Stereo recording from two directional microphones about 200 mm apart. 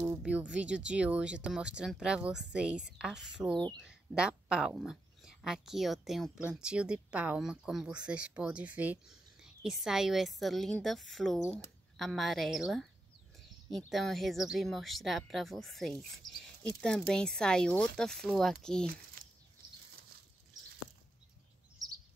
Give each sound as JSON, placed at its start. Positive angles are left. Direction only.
{"t": 0.0, "sound": "speech", "side_deg": -5}
{"t": 19.2, "sound": "bird flight", "side_deg": -45}